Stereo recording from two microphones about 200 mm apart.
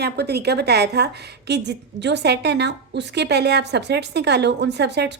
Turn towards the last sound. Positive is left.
turn(degrees=-55)  # may be behind; listen again after turning